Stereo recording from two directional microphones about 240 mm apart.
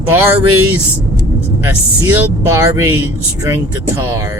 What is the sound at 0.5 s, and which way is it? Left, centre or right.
Speech, right.